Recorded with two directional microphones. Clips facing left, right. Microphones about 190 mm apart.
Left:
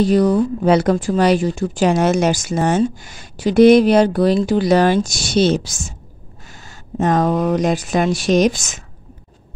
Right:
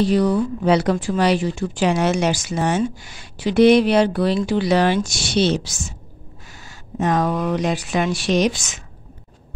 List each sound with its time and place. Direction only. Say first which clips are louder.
0.0 s speech: left 3 dB; 45° left (ahead or behind)